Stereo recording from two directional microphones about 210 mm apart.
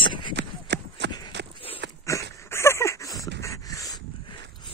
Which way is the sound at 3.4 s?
15° left (ahead or behind).